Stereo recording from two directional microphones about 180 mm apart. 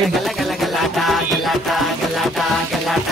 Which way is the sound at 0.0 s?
Centre (ahead or behind).